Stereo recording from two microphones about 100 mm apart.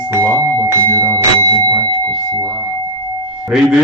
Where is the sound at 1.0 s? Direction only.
40° right (ahead or behind).